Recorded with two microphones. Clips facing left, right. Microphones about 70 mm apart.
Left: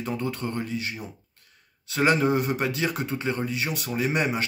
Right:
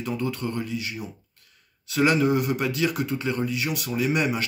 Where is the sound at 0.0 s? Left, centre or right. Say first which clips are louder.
Right 1 dB; left.